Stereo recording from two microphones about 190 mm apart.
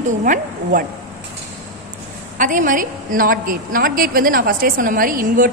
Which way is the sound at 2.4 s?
45° right (ahead or behind).